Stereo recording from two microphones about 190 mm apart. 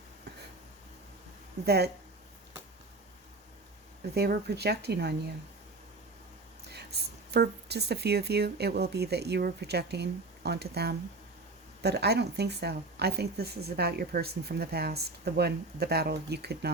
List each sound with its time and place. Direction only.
1.6 s speech: 60° right (ahead or behind)
4.1 s speech: 55° right (ahead or behind)
6.7 s speech: 60° right (ahead or behind)